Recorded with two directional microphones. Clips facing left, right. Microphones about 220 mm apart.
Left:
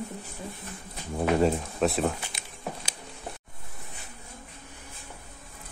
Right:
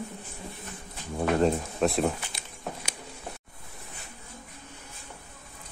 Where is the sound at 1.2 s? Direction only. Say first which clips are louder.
Even; 5° left (ahead or behind).